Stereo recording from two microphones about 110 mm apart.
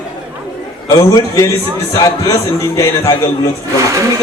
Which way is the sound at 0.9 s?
35° left (ahead or behind).